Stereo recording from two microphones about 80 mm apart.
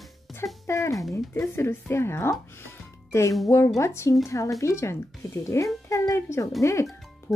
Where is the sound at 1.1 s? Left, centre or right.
Left.